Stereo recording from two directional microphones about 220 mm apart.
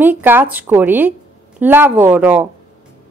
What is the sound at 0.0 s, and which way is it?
A woman's voice, 10° right (ahead or behind).